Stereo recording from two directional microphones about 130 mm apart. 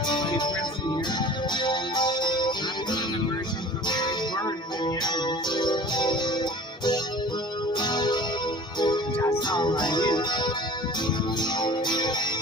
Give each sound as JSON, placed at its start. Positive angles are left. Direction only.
{"t": 0.1, "sound": "music", "side_deg": 35}